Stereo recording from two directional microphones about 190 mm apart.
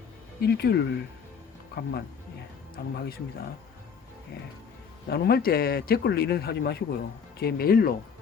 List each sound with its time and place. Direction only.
0.4 s a man's voice: 60° left (ahead or behind)
5.0 s a man's voice: 55° left (ahead or behind)